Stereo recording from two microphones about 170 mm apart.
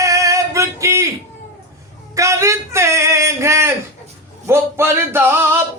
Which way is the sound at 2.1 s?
20° right (ahead or behind).